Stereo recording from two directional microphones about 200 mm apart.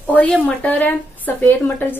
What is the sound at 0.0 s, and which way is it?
A woman's voice, 5° left (ahead or behind).